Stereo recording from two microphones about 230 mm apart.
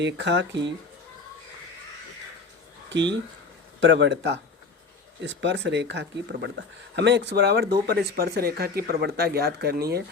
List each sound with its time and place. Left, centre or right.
0.0 s speech: right
2.9 s speech: right